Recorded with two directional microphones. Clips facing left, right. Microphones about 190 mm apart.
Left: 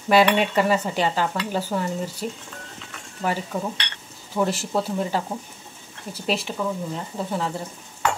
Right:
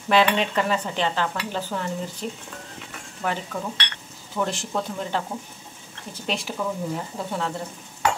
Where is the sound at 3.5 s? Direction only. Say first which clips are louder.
Left 3 dB; 20° left (ahead or behind).